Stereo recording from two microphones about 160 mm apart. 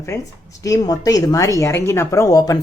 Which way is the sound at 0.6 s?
20° left (ahead or behind).